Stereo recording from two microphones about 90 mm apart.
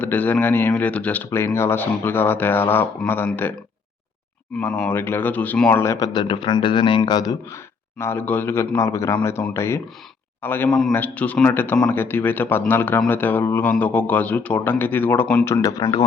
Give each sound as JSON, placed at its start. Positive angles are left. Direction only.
{"t": 0.0, "sound": "a man's voice", "side_deg": 20}
{"t": 4.6, "sound": "a man's voice", "side_deg": 20}
{"t": 5.7, "sound": "a man's voice", "side_deg": 30}
{"t": 6.0, "sound": "a man's voice", "side_deg": 60}
{"t": 7.5, "sound": "a man's voice", "side_deg": 30}
{"t": 10.7, "sound": "a man's voice", "side_deg": 5}
{"t": 10.9, "sound": "a man's voice", "side_deg": 15}
{"t": 15.6, "sound": "speech", "side_deg": 40}